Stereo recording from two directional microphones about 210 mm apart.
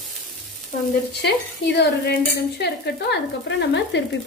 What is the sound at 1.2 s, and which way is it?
Stir, 55° left (ahead or behind).